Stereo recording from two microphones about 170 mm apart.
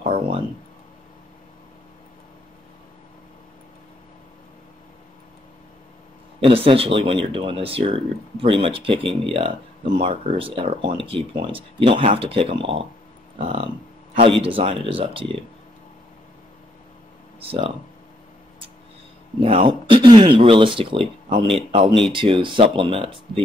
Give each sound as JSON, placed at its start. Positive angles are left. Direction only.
{"t": 0.0, "sound": "a sound", "side_deg": -35}
{"t": 6.4, "sound": "speech", "side_deg": -30}
{"t": 17.4, "sound": "speech", "side_deg": -35}
{"t": 19.4, "sound": "speech", "side_deg": -30}